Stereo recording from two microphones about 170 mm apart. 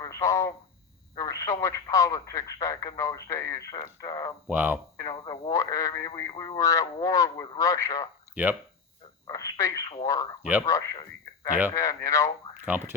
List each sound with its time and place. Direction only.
0.0 s speech: 20° left (ahead or behind)
4.4 s speech: 10° right (ahead or behind)
5.1 s speech: 30° left (ahead or behind)
8.4 s speech: 10° right (ahead or behind)
9.2 s speech: 20° left (ahead or behind)
12.6 s speech: 10° right (ahead or behind)